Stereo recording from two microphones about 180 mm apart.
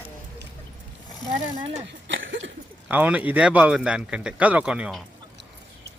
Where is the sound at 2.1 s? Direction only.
90° right.